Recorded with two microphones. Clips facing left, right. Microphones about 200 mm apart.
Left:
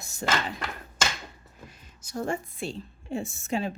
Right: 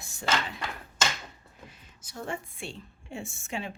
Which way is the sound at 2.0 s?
45° left (ahead or behind).